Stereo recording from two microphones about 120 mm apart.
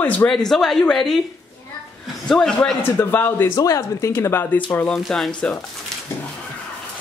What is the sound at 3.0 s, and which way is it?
Speech, 15° left (ahead or behind).